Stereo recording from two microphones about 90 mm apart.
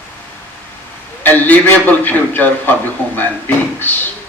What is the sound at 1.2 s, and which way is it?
A man's voice, 20° left (ahead or behind).